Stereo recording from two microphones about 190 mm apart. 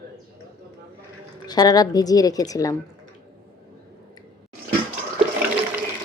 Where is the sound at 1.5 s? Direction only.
20° left (ahead or behind).